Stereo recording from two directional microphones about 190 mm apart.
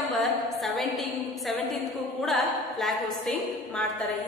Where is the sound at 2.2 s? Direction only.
Centre (ahead or behind).